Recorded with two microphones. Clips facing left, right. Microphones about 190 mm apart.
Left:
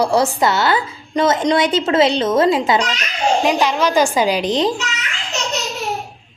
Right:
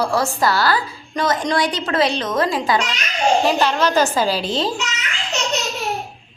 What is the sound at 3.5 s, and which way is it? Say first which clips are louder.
A woman's voice: left 1 dB; 10° left (ahead or behind).